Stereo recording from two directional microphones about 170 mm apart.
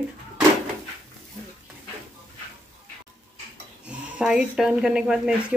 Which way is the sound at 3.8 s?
5° right (ahead or behind).